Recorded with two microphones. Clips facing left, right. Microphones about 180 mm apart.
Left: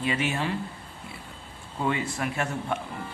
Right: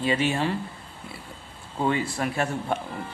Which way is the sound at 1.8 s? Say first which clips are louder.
Right 3 dB; 35° right (ahead or behind).